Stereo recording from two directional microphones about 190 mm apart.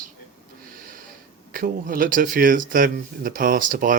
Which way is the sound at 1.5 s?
45° right (ahead or behind).